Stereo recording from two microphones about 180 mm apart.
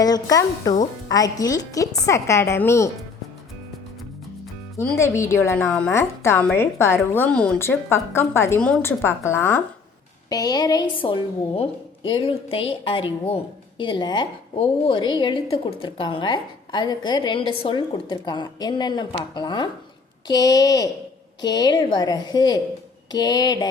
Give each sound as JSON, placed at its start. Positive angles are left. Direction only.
{"t": 0.0, "sound": "a woman's voice", "side_deg": 20}
{"t": 4.8, "sound": "a woman's voice", "side_deg": 15}